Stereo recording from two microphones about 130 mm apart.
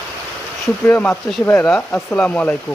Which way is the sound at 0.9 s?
15° left (ahead or behind).